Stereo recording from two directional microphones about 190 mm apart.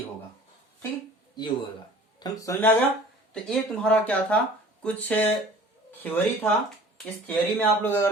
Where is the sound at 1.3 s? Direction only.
25° left (ahead or behind).